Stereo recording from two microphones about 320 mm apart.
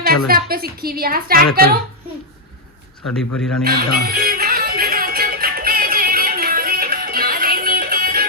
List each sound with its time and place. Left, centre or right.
0.3 s a woman's voice: right
3.1 s speech: centre
3.6 s music: right